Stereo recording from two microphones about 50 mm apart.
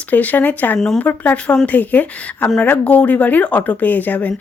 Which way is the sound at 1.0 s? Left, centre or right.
Left.